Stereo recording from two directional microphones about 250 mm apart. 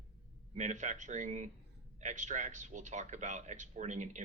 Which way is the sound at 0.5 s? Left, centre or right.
Right.